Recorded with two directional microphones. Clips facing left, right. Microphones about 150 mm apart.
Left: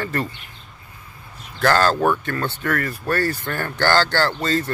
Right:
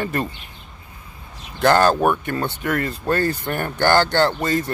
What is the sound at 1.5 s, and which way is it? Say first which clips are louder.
Speech: right 2 dB; 20° right (ahead or behind).